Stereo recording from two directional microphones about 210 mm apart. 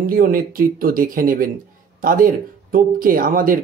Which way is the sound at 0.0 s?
40° right (ahead or behind).